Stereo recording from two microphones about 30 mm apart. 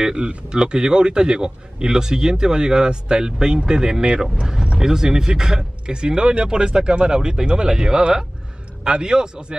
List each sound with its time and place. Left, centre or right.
0.0 s speech: right